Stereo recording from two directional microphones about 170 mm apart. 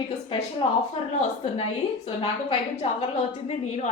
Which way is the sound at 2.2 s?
35° left (ahead or behind).